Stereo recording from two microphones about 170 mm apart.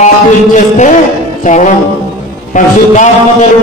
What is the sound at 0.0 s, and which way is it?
Music, 45° left (ahead or behind).